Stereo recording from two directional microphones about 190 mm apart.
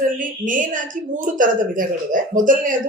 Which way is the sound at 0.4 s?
45° right (ahead or behind).